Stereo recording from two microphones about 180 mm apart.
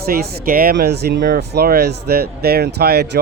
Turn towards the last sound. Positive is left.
turn(degrees=-65)  # may be behind; listen again after turning